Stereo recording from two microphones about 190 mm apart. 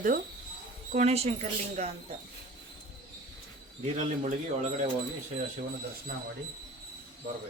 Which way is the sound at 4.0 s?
40° right (ahead or behind).